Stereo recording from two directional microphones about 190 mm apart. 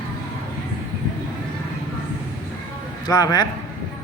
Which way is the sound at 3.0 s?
20° left (ahead or behind).